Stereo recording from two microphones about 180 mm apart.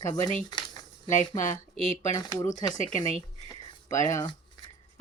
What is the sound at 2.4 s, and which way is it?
Speech, 45° left (ahead or behind).